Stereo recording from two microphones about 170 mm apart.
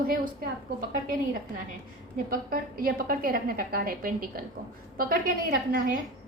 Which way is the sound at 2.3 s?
55° right (ahead or behind).